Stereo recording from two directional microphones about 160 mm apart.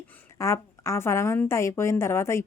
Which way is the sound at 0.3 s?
15° left (ahead or behind).